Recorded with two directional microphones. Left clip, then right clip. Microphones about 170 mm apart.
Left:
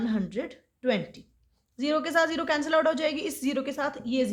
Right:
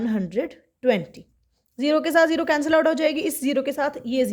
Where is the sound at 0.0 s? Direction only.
30° right (ahead or behind).